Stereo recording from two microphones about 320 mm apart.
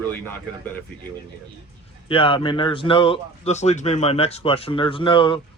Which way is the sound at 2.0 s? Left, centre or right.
Centre.